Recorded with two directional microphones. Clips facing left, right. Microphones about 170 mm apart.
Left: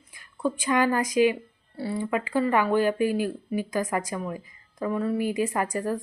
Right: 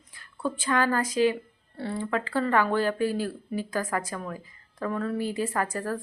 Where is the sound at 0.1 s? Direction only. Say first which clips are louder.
Left 3 dB; 15° left (ahead or behind).